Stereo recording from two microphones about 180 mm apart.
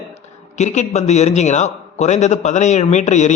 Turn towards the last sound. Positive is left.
turn(degrees=40)  # may be behind; listen again after turning